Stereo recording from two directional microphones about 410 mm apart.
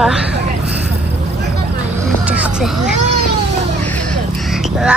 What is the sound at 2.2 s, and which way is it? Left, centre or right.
Vehicle, centre.